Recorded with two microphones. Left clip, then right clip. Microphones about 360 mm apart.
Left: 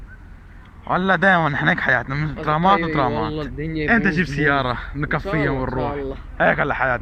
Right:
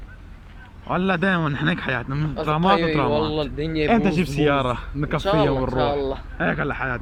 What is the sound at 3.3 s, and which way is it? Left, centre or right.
Speech, right.